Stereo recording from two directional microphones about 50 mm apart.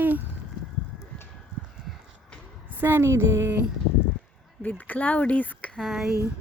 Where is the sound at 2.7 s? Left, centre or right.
Right.